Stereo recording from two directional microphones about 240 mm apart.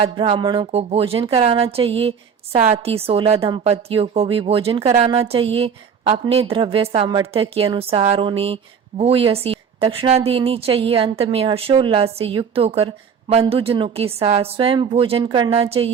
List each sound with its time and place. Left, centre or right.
0.0 s speech: right